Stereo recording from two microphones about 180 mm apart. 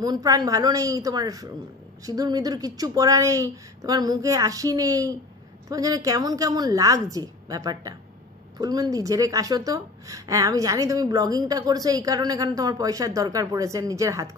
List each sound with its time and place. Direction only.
0.0 s a woman's voice: 20° right (ahead or behind)